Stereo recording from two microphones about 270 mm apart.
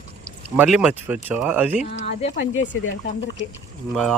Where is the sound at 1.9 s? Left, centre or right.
Left.